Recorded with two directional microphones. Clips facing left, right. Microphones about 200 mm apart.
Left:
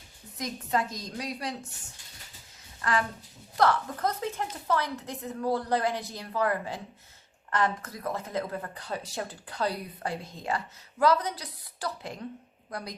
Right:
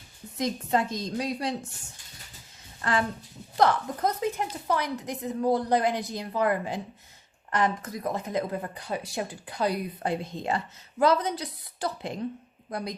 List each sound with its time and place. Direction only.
0.3 s a woman's voice: 25° right (ahead or behind)
2.8 s a woman's voice: 25° right (ahead or behind)